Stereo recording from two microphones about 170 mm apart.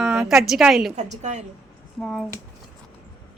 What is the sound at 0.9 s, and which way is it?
Speech, 45° right (ahead or behind).